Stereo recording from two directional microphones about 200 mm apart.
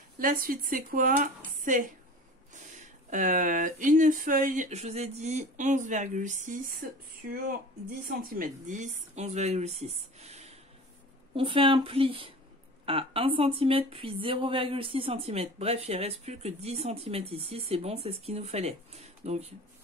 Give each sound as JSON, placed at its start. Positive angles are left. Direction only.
{"t": 0.2, "sound": "speech", "side_deg": -45}
{"t": 8.2, "sound": "speech", "side_deg": -45}